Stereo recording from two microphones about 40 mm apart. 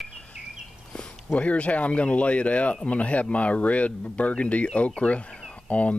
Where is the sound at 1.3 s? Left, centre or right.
Left.